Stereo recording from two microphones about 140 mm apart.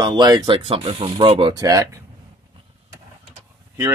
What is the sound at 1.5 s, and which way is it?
Speech, 25° right (ahead or behind).